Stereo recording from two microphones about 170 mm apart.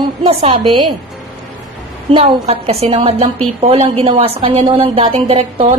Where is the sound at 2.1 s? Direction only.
35° right (ahead or behind).